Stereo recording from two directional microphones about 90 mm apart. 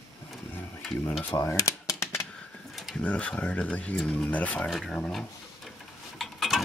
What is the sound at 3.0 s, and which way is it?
Speech, 15° left (ahead or behind).